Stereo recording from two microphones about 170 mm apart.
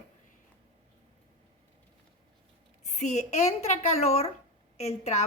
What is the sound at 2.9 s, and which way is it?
A woman's voice, 45° left (ahead or behind).